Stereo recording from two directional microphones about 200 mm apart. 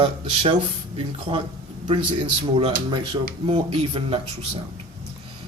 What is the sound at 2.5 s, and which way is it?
Speech, 25° right (ahead or behind).